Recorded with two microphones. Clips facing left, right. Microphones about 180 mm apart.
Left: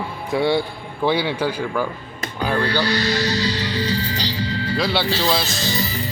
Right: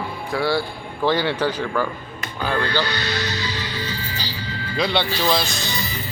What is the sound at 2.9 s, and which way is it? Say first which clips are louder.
Speech: left 5 dB; 35° left (ahead or behind).